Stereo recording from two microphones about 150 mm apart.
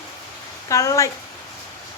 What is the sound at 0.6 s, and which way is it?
Speech, 20° left (ahead or behind).